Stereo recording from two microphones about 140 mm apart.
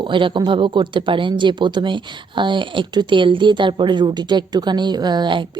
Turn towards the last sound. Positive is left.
turn(degrees=-35)  # may be behind; listen again after turning